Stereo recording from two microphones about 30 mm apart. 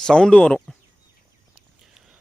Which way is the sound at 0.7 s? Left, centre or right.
Left.